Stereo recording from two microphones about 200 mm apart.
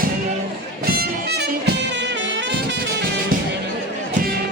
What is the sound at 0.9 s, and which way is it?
Music, 50° right (ahead or behind).